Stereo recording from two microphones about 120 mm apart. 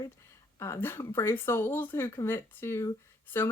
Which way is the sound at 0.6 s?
20° left (ahead or behind).